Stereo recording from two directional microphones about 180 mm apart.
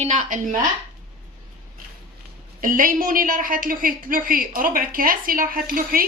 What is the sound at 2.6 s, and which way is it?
A woman's voice, 50° right (ahead or behind).